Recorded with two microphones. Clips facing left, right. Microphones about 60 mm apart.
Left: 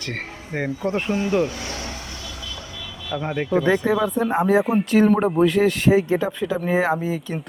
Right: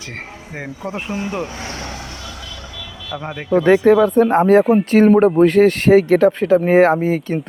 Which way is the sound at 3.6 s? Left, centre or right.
Right.